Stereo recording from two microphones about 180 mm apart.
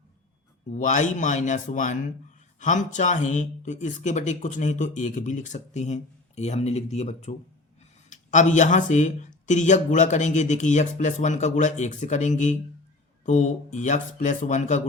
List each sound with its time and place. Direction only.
0.7 s speech: 40° left (ahead or behind)